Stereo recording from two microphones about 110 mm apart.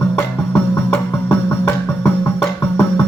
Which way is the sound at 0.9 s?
25° left (ahead or behind).